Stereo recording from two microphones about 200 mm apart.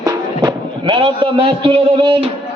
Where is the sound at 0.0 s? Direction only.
20° right (ahead or behind).